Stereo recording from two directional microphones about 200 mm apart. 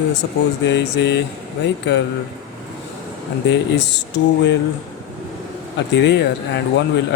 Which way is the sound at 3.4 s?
60° left (ahead or behind).